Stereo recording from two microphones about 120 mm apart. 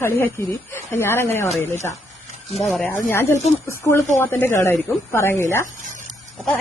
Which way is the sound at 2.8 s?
15° left (ahead or behind).